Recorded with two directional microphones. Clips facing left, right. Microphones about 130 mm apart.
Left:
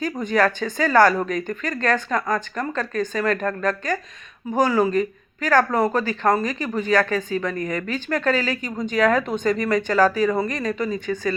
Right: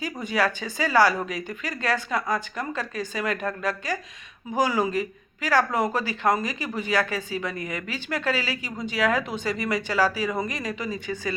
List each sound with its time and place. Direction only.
0.0 s a woman's voice: 10° right (ahead or behind)
7.5 s speech: 40° left (ahead or behind)
8.2 s speech: 10° right (ahead or behind)
9.0 s speech: 45° left (ahead or behind)
9.2 s speech: 10° right (ahead or behind)